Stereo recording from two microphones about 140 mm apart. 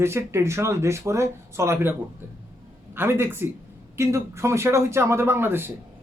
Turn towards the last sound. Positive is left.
turn(degrees=-15)  # may be behind; listen again after turning